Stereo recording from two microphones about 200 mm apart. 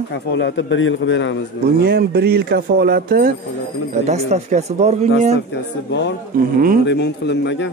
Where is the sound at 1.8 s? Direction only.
50° right (ahead or behind).